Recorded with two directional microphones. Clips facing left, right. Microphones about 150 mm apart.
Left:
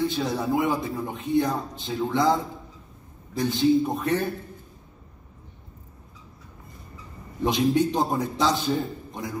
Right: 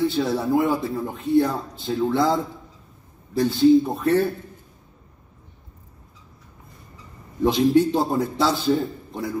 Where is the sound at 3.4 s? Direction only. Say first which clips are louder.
Right 5 dB; 15° left (ahead or behind).